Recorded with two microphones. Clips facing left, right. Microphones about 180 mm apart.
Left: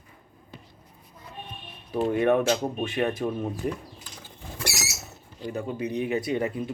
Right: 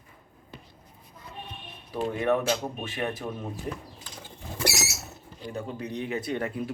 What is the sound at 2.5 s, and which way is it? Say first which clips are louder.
Speech: left 4 dB; 30° left (ahead or behind).